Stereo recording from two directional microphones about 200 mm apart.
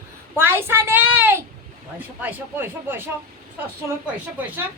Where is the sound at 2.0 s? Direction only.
10° right (ahead or behind).